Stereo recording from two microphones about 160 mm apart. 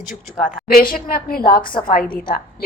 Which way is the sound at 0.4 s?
60° left (ahead or behind).